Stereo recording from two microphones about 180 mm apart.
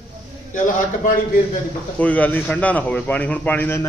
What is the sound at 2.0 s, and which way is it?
A man's voice, 10° left (ahead or behind).